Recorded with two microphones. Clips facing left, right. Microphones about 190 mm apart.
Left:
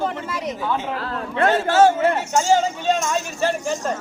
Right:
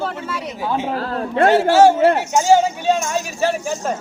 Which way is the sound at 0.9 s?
35° right (ahead or behind).